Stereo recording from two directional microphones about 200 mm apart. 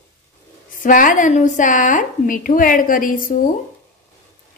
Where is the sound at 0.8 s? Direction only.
40° left (ahead or behind).